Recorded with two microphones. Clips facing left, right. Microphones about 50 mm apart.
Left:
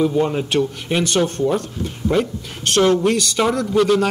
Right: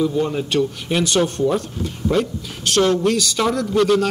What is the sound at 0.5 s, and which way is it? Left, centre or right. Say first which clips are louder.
Speech: even; centre.